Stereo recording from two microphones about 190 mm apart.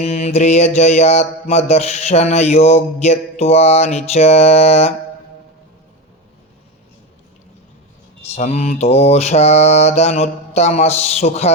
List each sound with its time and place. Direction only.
0.0 s mantra: 35° left (ahead or behind)
8.4 s mantra: 35° left (ahead or behind)